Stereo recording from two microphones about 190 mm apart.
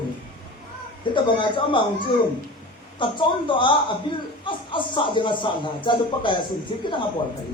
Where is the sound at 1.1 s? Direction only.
25° left (ahead or behind).